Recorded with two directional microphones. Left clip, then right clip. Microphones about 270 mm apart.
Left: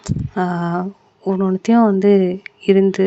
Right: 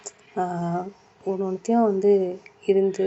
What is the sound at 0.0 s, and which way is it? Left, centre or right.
Speech, left.